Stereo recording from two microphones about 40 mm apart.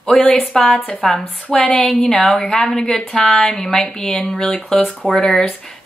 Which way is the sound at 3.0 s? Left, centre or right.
Left.